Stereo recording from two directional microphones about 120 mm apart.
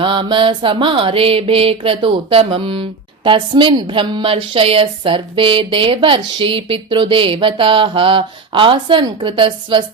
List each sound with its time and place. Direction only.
0.0 s a woman's voice: 40° right (ahead or behind)